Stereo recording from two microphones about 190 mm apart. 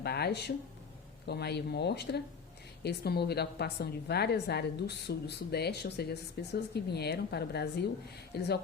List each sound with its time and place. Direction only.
0.0 s a woman's voice: 60° left (ahead or behind)